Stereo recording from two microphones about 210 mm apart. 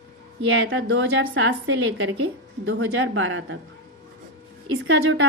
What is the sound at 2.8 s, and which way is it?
Speech, 70° right (ahead or behind).